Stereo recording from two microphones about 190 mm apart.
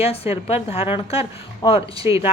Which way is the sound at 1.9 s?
15° right (ahead or behind).